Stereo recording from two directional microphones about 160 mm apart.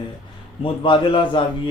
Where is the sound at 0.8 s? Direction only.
30° left (ahead or behind).